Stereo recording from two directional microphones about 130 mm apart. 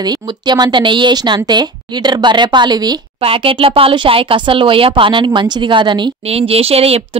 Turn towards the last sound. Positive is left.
turn(degrees=-50)  # may be behind; listen again after turning